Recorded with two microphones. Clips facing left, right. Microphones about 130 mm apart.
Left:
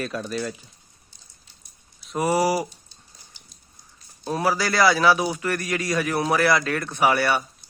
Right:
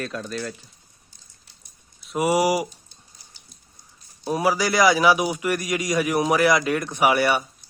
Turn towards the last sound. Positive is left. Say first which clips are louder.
# right 1 dB
turn(degrees=-15)  # may be behind; listen again after turning